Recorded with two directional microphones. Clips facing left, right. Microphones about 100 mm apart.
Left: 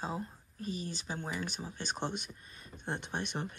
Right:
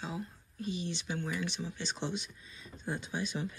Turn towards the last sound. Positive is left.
turn(degrees=60)  # may be behind; listen again after turning